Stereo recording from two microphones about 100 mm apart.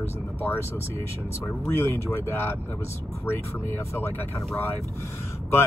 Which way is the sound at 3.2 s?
25° left (ahead or behind).